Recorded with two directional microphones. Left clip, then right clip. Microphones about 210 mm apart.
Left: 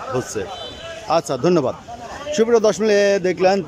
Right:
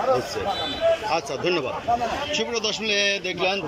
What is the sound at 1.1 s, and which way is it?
Speech, 25° left (ahead or behind).